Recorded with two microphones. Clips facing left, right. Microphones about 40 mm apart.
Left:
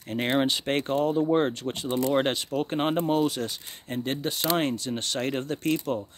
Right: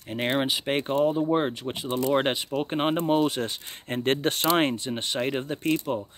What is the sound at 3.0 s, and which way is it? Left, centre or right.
Speech, right.